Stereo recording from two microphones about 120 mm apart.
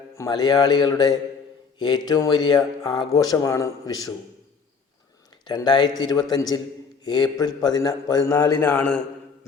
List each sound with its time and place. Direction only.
0.3 s speech: 35° left (ahead or behind)
5.5 s speech: 35° left (ahead or behind)
8.7 s a man's voice: 15° left (ahead or behind)